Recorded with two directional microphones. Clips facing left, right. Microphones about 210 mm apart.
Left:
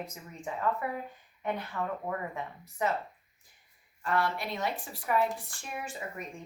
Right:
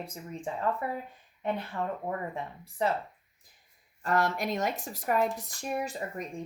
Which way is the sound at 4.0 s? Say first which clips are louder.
Right 3 dB; 45° right (ahead or behind).